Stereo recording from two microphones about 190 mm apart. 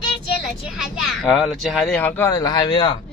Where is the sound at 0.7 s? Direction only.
Centre (ahead or behind).